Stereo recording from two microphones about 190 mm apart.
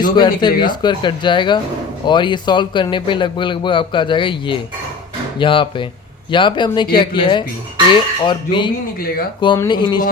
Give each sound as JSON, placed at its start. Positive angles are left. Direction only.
{"t": 0.2, "sound": "speech", "side_deg": 25}
{"t": 9.0, "sound": "speech", "side_deg": 50}
{"t": 9.6, "sound": "speech", "side_deg": 25}